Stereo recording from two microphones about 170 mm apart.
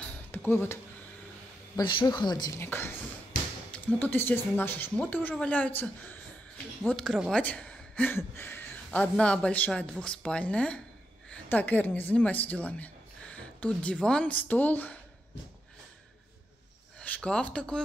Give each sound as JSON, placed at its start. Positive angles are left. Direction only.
{"t": 0.3, "sound": "speech", "side_deg": 10}
{"t": 1.8, "sound": "speech", "side_deg": 25}
{"t": 2.6, "sound": "speech", "side_deg": 15}
{"t": 6.9, "sound": "a woman's voice", "side_deg": 0}
{"t": 17.0, "sound": "speech", "side_deg": 5}